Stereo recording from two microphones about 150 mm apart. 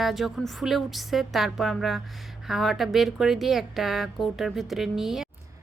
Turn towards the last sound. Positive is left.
turn(degrees=0)  # may be behind; listen again after turning